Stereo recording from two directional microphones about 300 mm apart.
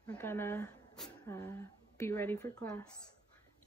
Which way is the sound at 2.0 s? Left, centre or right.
Centre.